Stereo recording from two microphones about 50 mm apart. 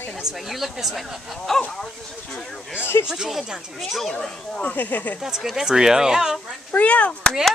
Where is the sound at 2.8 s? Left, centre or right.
Left.